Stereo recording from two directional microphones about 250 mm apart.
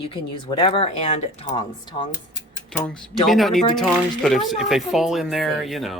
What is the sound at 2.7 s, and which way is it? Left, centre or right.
Speech, centre.